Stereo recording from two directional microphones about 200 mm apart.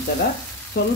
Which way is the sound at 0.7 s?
50° left (ahead or behind).